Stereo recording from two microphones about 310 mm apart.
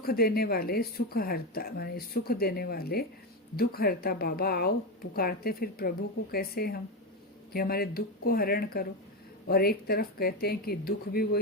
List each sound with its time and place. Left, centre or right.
0.0 s speech: left